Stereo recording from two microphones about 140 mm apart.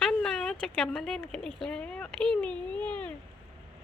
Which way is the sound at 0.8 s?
5° left (ahead or behind).